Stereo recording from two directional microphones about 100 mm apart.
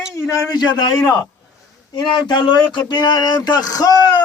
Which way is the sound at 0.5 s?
45° left (ahead or behind).